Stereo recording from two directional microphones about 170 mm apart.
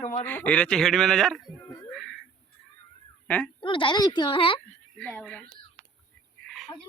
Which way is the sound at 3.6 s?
30° left (ahead or behind).